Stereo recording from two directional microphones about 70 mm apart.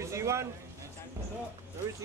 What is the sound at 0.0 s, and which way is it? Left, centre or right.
Speech, right.